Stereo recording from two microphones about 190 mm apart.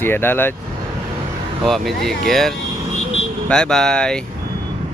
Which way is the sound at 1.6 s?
Centre (ahead or behind).